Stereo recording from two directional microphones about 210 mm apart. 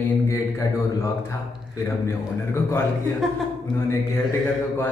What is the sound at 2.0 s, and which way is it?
Speech, 10° left (ahead or behind).